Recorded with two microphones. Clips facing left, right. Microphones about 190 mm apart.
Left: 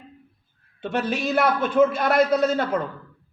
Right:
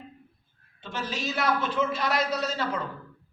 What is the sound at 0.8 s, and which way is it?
A man's voice, 60° left (ahead or behind).